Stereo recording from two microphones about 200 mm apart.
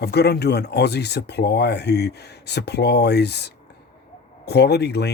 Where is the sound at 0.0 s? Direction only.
55° left (ahead or behind).